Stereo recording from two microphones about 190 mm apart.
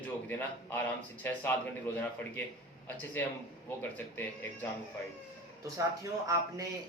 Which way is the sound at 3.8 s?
10° left (ahead or behind).